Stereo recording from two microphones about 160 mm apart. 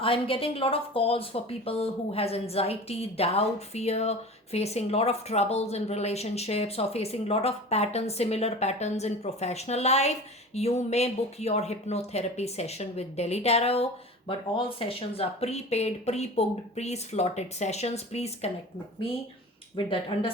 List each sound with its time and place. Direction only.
0.0 s speech: 35° left (ahead or behind)
19.7 s speech: 35° left (ahead or behind)